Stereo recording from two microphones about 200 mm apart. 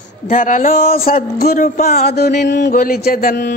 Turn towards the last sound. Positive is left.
turn(degrees=50)  # may be behind; listen again after turning